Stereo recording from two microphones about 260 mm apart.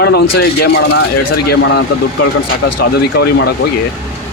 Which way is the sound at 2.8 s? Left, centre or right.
Left.